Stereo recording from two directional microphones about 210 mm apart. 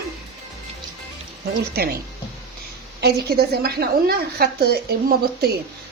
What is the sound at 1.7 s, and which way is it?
Speech, 50° right (ahead or behind).